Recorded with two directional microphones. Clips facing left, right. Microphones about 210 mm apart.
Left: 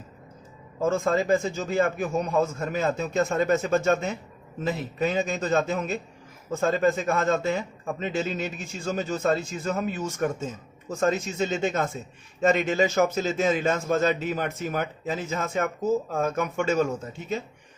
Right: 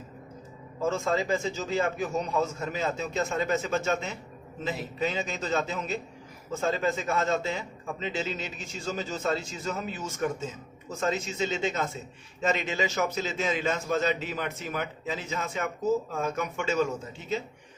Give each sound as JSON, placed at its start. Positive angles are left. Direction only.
{"t": 0.9, "sound": "a man's voice", "side_deg": 50}